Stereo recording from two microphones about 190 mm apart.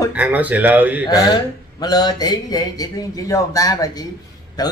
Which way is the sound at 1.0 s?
20° left (ahead or behind).